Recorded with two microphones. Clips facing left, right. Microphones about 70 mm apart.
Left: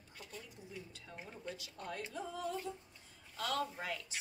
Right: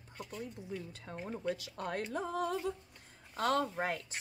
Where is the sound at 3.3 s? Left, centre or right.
Right.